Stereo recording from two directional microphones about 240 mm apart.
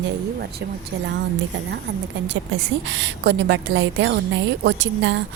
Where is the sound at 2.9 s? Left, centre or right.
Right.